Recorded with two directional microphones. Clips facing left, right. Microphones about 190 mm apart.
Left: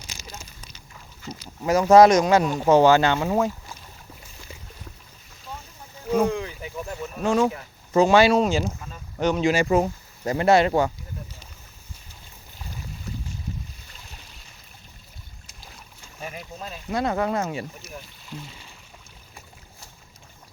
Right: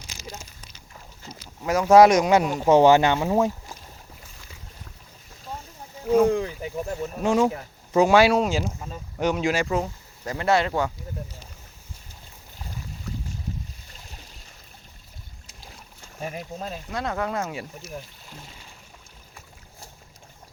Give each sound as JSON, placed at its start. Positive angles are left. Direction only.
{"t": 1.6, "sound": "speech", "side_deg": 0}
{"t": 6.2, "sound": "a sound", "side_deg": -40}
{"t": 7.2, "sound": "speech", "side_deg": -20}
{"t": 9.8, "sound": "speech", "side_deg": 20}
{"t": 13.9, "sound": "a sound", "side_deg": -40}
{"t": 16.2, "sound": "boat", "side_deg": -35}
{"t": 16.9, "sound": "speech", "side_deg": 5}
{"t": 17.9, "sound": "speech", "side_deg": -45}